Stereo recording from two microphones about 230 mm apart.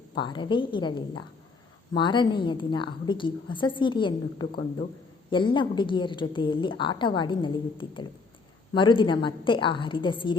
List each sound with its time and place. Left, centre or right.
0.1 s a woman's voice: left